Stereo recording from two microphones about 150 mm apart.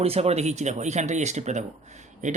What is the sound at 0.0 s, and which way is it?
Speech, 45° right (ahead or behind).